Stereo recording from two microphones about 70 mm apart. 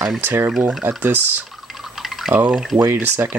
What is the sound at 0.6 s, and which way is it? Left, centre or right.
Speech, right.